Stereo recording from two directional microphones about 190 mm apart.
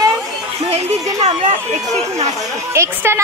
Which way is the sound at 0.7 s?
35° right (ahead or behind).